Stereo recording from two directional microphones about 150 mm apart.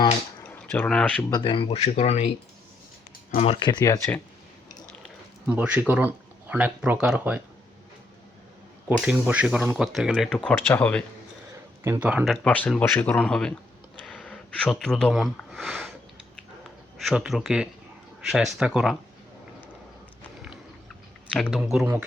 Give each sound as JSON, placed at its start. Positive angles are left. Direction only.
{"t": 0.7, "sound": "speech", "side_deg": 5}
{"t": 1.3, "sound": "speech", "side_deg": 30}
{"t": 3.3, "sound": "speech", "side_deg": 40}
{"t": 3.7, "sound": "speech", "side_deg": 25}
{"t": 5.0, "sound": "speech", "side_deg": -5}
{"t": 8.9, "sound": "speech", "side_deg": -10}
{"t": 11.8, "sound": "speech", "side_deg": -15}
{"t": 12.4, "sound": "a man's voice", "side_deg": 10}
{"t": 21.3, "sound": "speech", "side_deg": 5}
{"t": 21.6, "sound": "speech", "side_deg": -5}